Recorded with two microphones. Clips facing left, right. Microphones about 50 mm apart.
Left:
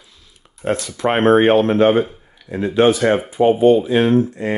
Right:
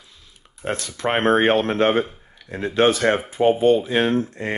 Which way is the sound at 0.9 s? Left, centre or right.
Left.